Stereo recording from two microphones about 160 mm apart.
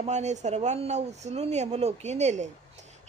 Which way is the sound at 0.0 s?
45° right (ahead or behind).